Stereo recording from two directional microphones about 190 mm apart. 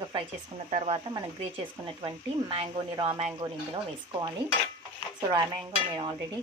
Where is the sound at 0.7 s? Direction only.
35° right (ahead or behind).